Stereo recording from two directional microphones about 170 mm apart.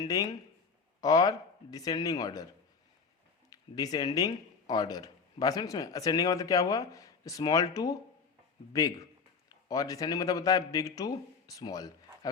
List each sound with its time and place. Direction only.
0.0 s speech: 20° left (ahead or behind)
3.5 s a man's voice: 25° left (ahead or behind)